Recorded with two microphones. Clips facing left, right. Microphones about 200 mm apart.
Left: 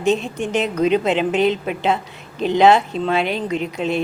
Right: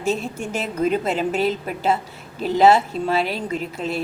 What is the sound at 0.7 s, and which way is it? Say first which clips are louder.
Speech: left 3 dB; 75° left (ahead or behind).